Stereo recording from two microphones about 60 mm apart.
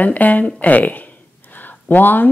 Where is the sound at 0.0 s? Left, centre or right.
Left.